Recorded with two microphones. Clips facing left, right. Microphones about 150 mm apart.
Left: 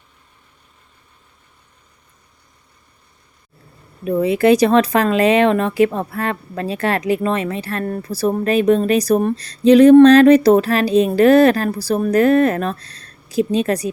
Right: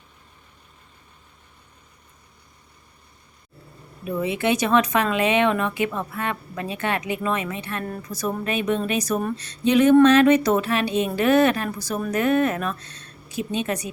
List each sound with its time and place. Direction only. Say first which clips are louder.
4.0 s speech: left 9 dB; 40° left (ahead or behind)